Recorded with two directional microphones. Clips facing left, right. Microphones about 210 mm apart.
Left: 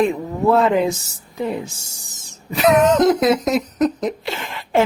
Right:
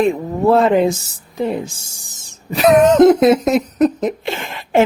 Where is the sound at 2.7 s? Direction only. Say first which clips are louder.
Right 6 dB; 25° right (ahead or behind).